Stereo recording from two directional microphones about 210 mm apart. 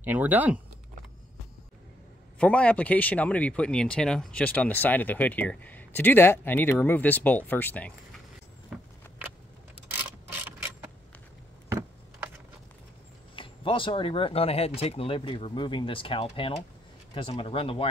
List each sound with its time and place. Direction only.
0.0 s speech: 10° right (ahead or behind)
2.3 s speech: 5° left (ahead or behind)
10.4 s a sound: 10° right (ahead or behind)
13.4 s speech: 25° left (ahead or behind)